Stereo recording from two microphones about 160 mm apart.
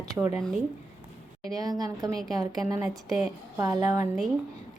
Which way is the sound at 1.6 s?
25° right (ahead or behind).